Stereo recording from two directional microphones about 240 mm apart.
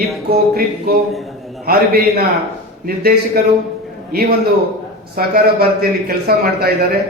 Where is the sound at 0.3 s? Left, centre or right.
Right.